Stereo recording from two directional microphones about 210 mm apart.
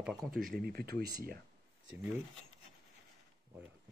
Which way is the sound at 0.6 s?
45° right (ahead or behind).